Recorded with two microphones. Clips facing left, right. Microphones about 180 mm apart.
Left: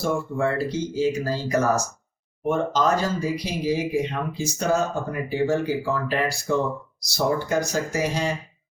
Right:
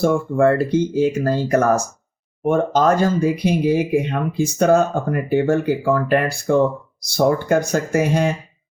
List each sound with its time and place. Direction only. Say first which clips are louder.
0.0 s speech: right 8 dB; 55° right (ahead or behind)